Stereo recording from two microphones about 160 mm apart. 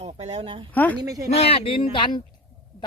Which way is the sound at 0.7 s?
10° left (ahead or behind).